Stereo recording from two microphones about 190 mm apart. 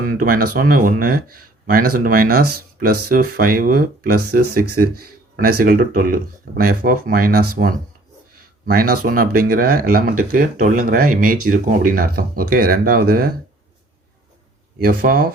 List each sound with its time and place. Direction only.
0.0 s speech: 45° right (ahead or behind)
14.8 s speech: 50° right (ahead or behind)